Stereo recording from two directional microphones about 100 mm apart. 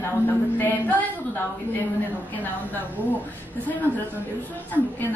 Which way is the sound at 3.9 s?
20° right (ahead or behind).